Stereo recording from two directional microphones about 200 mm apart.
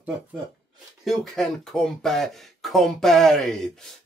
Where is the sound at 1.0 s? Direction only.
Centre (ahead or behind).